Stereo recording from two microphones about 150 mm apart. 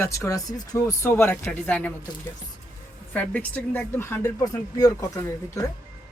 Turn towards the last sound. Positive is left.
turn(degrees=20)  # may be behind; listen again after turning